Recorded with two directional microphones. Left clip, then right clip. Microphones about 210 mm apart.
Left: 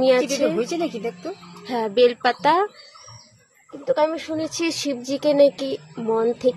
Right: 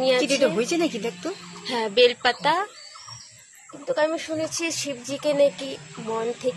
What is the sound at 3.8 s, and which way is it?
Speech, 40° left (ahead or behind).